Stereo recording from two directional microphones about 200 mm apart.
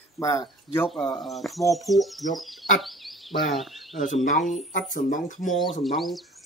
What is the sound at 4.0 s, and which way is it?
Speech, 40° left (ahead or behind).